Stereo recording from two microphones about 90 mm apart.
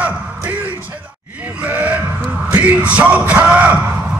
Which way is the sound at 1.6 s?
20° right (ahead or behind).